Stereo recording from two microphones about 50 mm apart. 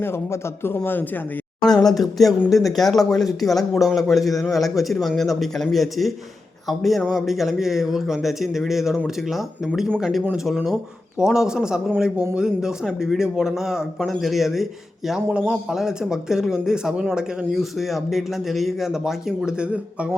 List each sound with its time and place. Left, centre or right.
0.0 s a man's voice: left
0.9 s speech: left
1.6 s a man's voice: centre
7.0 s a man's voice: centre
7.3 s a man's voice: centre
15.3 s a man's voice: right
15.7 s a man's voice: centre
19.5 s a man's voice: right